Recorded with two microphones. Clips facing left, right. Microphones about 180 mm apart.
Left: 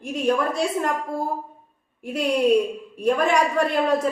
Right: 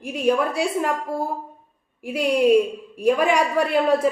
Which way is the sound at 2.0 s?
5° right (ahead or behind).